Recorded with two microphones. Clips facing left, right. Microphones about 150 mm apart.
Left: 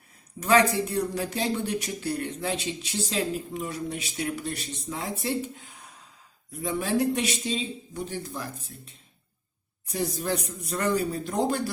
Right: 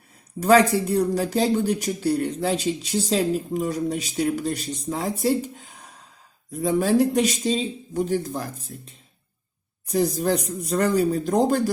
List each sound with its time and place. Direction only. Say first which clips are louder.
0.3 s speech: right 5 dB; 40° right (ahead or behind)